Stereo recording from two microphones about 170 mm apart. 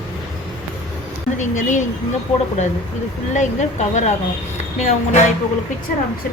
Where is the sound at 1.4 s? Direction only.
45° left (ahead or behind).